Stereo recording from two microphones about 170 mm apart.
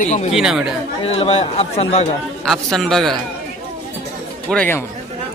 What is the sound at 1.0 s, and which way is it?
A man's voice, 35° left (ahead or behind).